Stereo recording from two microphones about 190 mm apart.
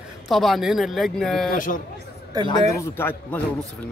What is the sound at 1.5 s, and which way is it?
Speech, 45° left (ahead or behind).